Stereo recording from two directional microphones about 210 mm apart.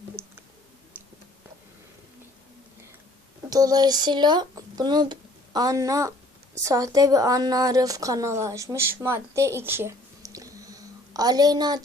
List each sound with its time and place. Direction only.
0.2 s clicking: 10° right (ahead or behind)
3.5 s a woman's voice: 20° right (ahead or behind)